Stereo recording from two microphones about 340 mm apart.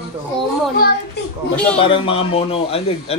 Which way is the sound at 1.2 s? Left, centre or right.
Left.